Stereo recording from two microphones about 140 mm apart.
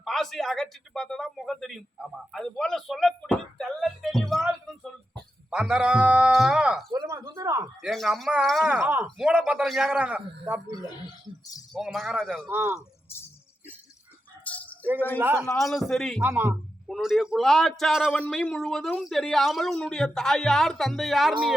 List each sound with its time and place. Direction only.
0.0 s a man's voice: centre (ahead or behind)
6.9 s a sound: 25° right (ahead or behind)
7.8 s a man's voice: centre (ahead or behind)
11.7 s a man's voice: centre (ahead or behind)
12.5 s speech: 20° right (ahead or behind)
14.4 s keys jangling: 10° left (ahead or behind)
15.2 s a man's voice: 15° right (ahead or behind)
15.4 s a man's voice: centre (ahead or behind)
16.2 s a man's voice: 15° right (ahead or behind)
16.8 s a man's voice: centre (ahead or behind)